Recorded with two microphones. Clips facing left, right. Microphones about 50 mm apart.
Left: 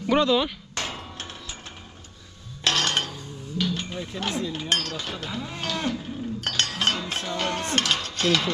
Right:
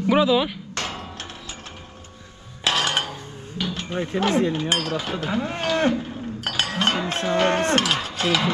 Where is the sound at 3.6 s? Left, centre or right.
Centre.